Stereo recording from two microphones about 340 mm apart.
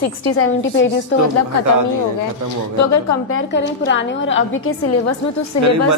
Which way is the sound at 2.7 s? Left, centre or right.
Left.